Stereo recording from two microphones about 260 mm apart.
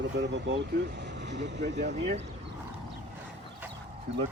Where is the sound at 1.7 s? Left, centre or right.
Right.